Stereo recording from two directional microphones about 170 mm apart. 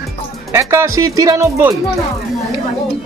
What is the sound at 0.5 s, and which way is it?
Speech, 15° right (ahead or behind).